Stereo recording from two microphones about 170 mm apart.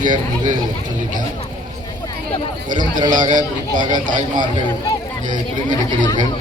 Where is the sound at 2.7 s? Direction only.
25° right (ahead or behind).